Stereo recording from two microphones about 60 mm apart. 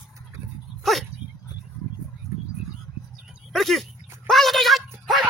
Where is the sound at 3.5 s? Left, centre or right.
Centre.